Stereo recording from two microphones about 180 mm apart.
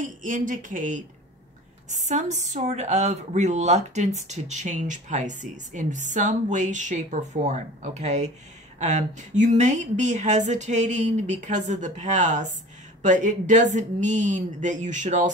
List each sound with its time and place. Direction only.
0.0 s speech: 45° right (ahead or behind)